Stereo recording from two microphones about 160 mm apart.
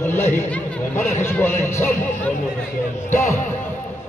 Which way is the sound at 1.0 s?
45° left (ahead or behind).